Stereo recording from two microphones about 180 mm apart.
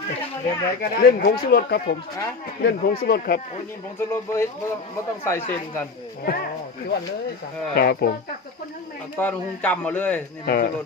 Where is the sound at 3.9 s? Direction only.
15° left (ahead or behind).